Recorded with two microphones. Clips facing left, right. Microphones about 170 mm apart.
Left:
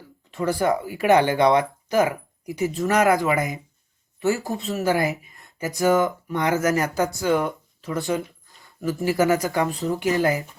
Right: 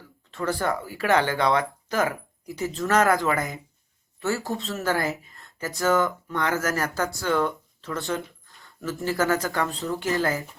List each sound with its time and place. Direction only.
0.3 s speech: 15° left (ahead or behind)